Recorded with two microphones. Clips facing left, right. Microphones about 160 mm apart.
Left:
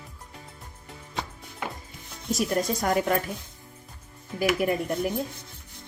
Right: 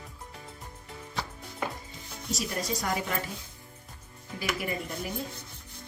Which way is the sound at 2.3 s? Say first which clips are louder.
Left 7 dB; 50° left (ahead or behind).